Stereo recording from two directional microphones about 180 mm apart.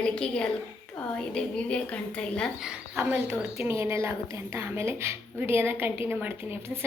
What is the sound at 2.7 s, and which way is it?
A woman's voice, 10° right (ahead or behind).